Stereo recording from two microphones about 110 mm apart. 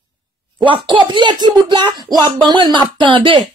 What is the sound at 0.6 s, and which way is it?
Speech, 50° right (ahead or behind).